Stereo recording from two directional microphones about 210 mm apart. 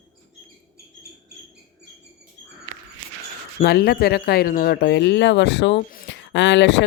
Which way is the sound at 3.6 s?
50° left (ahead or behind).